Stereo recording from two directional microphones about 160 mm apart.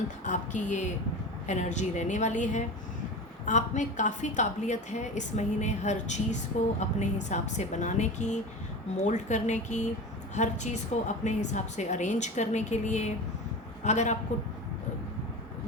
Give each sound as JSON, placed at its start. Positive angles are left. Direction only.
{"t": 0.3, "sound": "a woman's voice", "side_deg": 50}